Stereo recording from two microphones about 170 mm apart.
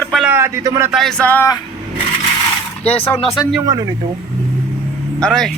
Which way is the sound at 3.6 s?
20° right (ahead or behind).